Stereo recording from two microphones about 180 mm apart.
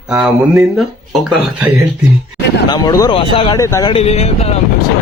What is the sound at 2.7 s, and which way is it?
Speech, 20° left (ahead or behind).